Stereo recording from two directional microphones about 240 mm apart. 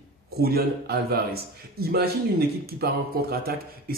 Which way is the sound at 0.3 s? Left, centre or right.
Right.